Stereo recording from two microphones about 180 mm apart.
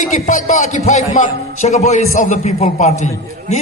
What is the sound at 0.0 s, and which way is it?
A man's voice, 45° left (ahead or behind).